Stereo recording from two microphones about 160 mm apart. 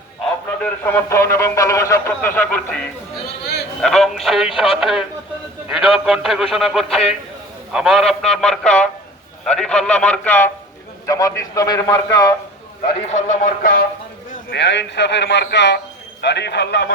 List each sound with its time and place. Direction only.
0.6 s a man's voice: 10° left (ahead or behind)
13.1 s speech: 50° left (ahead or behind); by 13.8 s 65° left (ahead or behind)
14.3 s a man's voice: 90° left